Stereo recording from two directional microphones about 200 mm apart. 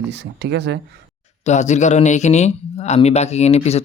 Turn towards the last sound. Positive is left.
turn(degrees=30)  # may be behind; listen again after turning